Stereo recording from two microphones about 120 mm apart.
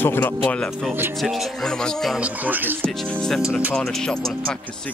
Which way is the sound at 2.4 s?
15° right (ahead or behind).